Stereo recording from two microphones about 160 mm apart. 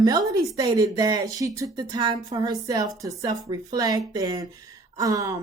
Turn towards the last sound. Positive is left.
turn(degrees=-20)  # may be behind; listen again after turning